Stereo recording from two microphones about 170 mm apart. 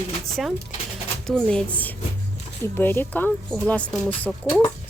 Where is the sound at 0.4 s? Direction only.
Centre (ahead or behind).